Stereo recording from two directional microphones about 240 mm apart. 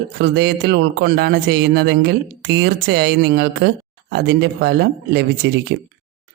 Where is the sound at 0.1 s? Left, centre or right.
Right.